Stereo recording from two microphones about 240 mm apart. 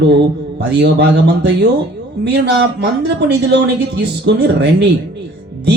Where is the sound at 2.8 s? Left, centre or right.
Right.